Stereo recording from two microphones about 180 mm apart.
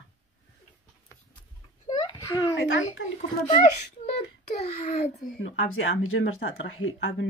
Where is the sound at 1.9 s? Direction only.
20° left (ahead or behind).